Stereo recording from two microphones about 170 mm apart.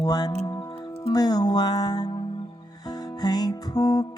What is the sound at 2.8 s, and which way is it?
Music, 20° left (ahead or behind).